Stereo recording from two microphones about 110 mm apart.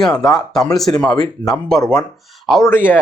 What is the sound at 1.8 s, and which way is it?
Speech, 35° left (ahead or behind).